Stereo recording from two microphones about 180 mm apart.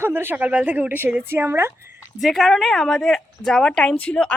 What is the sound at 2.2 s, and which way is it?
Speech, centre (ahead or behind).